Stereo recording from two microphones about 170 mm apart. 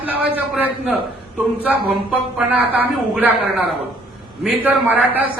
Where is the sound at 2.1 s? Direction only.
10° right (ahead or behind).